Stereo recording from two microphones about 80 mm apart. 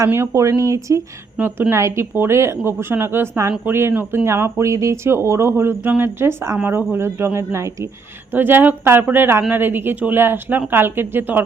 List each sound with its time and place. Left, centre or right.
0.0 s speech: right
1.4 s speech: right
8.3 s speech: right